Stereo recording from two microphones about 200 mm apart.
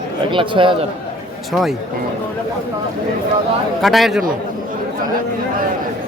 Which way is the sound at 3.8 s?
Centre (ahead or behind).